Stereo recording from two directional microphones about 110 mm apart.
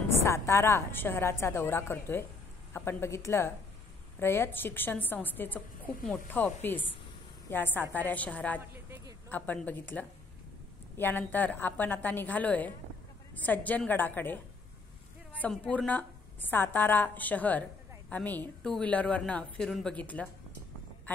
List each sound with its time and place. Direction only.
0.2 s a woman's voice: 25° left (ahead or behind)
8.5 s a woman's voice: 20° right (ahead or behind)
9.3 s a woman's voice: 15° left (ahead or behind)
15.6 s a woman's voice: 10° left (ahead or behind)